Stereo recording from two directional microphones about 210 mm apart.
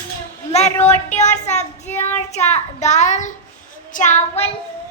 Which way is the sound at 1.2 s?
35° left (ahead or behind).